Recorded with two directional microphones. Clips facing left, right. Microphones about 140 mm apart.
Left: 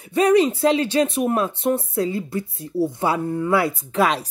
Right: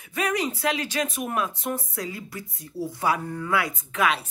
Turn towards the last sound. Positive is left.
turn(degrees=35)  # may be behind; listen again after turning